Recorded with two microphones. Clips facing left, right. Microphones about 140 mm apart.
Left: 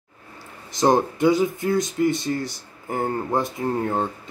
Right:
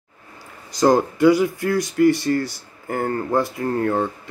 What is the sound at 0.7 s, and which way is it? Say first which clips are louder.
Speech: right 2 dB; 20° left (ahead or behind).